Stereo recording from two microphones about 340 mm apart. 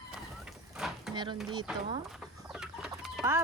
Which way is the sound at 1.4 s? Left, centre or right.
Centre.